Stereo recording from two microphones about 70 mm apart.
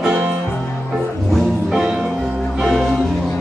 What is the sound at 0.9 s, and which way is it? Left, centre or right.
Music, centre.